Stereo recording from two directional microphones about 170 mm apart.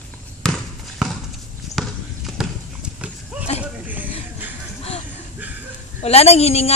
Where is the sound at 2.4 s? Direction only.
5° right (ahead or behind).